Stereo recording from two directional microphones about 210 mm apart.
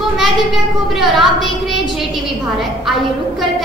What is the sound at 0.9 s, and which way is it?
Speech, centre (ahead or behind).